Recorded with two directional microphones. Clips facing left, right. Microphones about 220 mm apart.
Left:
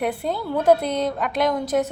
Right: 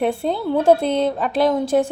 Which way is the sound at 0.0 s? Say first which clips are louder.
Right 4 dB; 25° right (ahead or behind).